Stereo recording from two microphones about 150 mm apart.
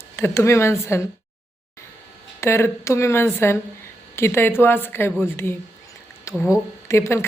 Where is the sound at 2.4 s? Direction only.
15° left (ahead or behind).